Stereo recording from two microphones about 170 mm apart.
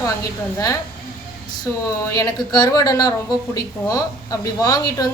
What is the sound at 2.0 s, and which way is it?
A woman's voice, 20° left (ahead or behind).